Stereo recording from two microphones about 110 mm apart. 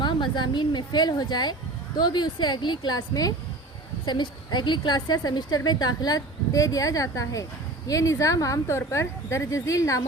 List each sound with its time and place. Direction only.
0.0 s a woman's voice: 45° left (ahead or behind)